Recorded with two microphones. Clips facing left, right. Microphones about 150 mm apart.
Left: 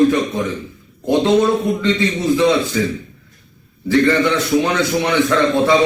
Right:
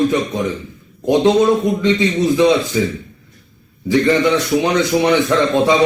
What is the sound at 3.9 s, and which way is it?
Speech, 15° right (ahead or behind).